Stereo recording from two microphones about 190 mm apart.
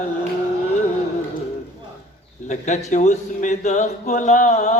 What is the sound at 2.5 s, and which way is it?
Mantra, 40° left (ahead or behind).